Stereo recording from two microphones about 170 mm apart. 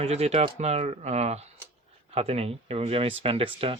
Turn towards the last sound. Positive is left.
turn(degrees=-35)  # may be behind; listen again after turning